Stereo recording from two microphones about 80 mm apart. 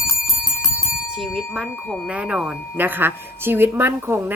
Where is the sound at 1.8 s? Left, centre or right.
Centre.